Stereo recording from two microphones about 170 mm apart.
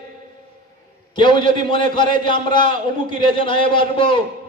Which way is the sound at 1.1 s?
30° left (ahead or behind).